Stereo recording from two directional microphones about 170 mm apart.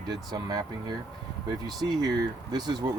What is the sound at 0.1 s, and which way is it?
Speech, 25° right (ahead or behind).